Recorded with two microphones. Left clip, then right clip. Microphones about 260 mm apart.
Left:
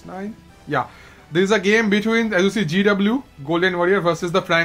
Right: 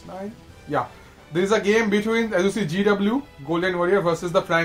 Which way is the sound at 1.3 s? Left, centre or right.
Left.